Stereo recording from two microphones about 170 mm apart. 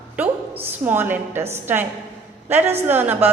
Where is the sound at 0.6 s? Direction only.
10° right (ahead or behind).